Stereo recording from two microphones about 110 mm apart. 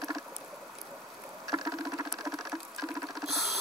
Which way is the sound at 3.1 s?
Centre (ahead or behind).